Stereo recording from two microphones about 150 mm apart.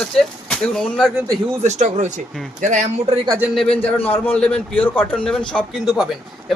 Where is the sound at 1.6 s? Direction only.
50° right (ahead or behind).